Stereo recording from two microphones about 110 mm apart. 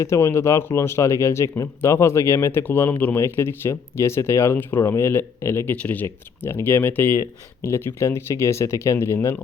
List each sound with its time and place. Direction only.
0.0 s speech: 25° left (ahead or behind)